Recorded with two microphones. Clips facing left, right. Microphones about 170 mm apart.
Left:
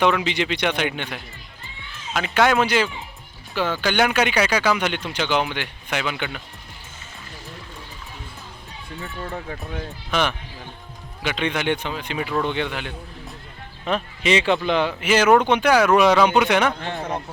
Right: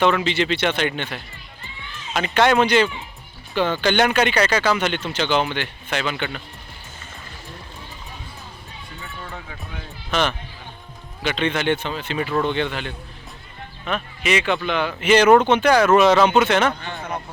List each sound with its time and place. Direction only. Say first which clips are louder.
0.0 s speech: right 1 dB; 15° left (ahead or behind)
9.0 s speech: left 6 dB; 40° left (ahead or behind)
10.1 s speech: right 1 dB; 10° left (ahead or behind)
13.8 s speech: left 2 dB; 30° left (ahead or behind)
15.0 s speech: right 4 dB; 5° left (ahead or behind)